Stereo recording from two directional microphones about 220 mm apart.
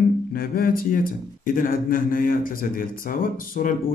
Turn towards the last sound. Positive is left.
turn(degrees=40)  # may be behind; listen again after turning